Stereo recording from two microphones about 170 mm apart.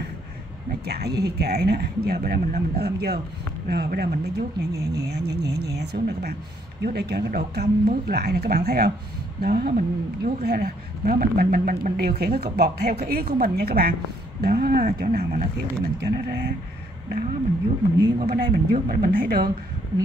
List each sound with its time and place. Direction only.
0.7 s a woman's voice: 70° right (ahead or behind)
16.0 s speech: 70° right (ahead or behind)
18.0 s a woman's voice: 65° right (ahead or behind)